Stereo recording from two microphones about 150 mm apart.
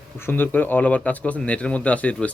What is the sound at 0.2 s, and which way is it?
Speech, 15° left (ahead or behind).